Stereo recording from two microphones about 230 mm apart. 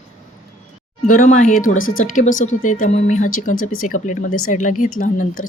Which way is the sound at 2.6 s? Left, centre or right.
Left.